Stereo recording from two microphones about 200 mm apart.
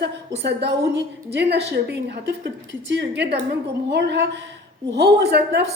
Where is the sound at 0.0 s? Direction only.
60° right (ahead or behind).